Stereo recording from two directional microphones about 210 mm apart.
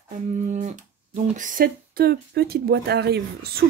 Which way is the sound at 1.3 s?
40° right (ahead or behind).